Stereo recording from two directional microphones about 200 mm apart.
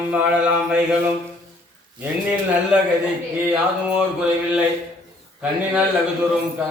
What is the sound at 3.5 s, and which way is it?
Mantra, 5° right (ahead or behind).